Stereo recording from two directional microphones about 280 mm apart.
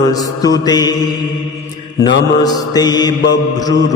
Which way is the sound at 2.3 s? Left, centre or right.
Centre.